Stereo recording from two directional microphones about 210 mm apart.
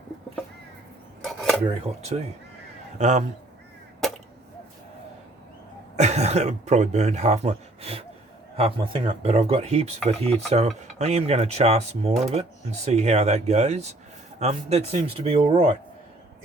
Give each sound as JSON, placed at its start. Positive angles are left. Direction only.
{"t": 1.2, "sound": "dishes", "side_deg": 0}
{"t": 2.0, "sound": "stir", "side_deg": -30}
{"t": 6.0, "sound": "stir", "side_deg": -30}
{"t": 8.5, "sound": "speech", "side_deg": -25}
{"t": 10.1, "sound": "stir", "side_deg": -30}
{"t": 14.3, "sound": "speech", "side_deg": -30}